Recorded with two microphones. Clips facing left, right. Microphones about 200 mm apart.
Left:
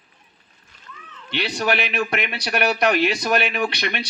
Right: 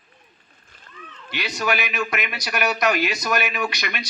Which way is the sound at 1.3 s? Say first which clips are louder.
Left 2 dB; 30° left (ahead or behind).